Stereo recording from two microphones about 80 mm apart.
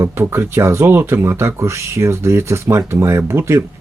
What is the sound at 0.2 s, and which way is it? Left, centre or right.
Speech, right.